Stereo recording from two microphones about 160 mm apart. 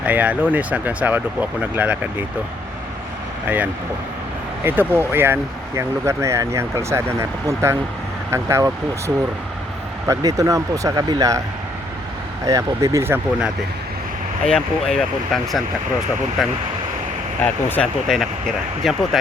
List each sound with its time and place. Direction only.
0.0 s speech: 10° right (ahead or behind)
3.4 s speech: 10° right (ahead or behind)
12.5 s speech: 20° right (ahead or behind)
14.4 s speech: 5° left (ahead or behind)